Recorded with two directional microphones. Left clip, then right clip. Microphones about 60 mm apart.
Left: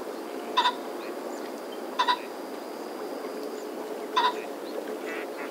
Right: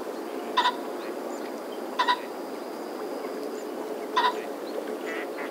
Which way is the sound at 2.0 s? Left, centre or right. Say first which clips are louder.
Right 1 dB; left.